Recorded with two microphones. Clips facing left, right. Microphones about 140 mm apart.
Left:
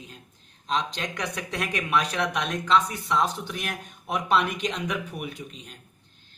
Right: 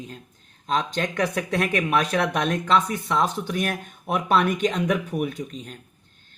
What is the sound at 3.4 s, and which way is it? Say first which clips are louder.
A man's voice: right 7 dB; 50° right (ahead or behind).